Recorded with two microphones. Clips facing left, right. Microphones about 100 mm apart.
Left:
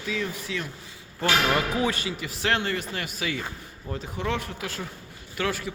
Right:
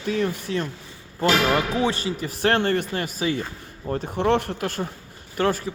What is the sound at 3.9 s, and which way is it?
Speech, 50° right (ahead or behind).